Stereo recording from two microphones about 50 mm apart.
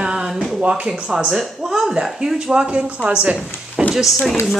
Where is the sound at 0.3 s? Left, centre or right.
Centre.